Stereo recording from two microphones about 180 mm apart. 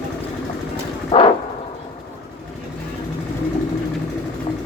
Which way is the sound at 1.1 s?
25° left (ahead or behind).